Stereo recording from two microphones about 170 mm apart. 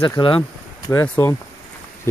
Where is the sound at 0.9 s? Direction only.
15° left (ahead or behind).